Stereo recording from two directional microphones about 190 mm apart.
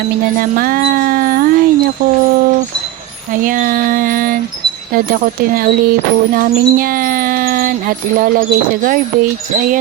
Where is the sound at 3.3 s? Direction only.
45° right (ahead or behind).